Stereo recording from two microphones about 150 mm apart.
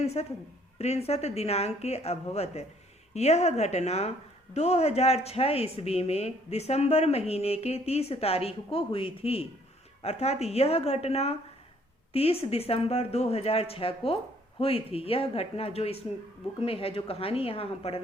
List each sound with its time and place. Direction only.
0.0 s a woman's voice: 45° left (ahead or behind)